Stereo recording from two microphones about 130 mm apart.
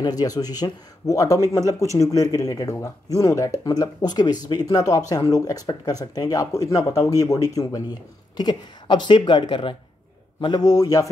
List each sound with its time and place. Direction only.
0.0 s speech: 30° left (ahead or behind)